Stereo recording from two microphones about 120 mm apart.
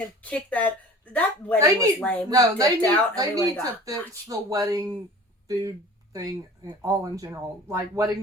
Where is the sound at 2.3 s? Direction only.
30° right (ahead or behind).